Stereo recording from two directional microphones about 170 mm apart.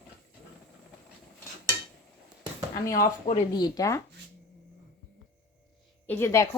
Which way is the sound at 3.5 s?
25° left (ahead or behind).